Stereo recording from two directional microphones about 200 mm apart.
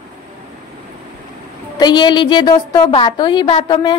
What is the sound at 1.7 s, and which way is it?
A woman's voice, 20° left (ahead or behind).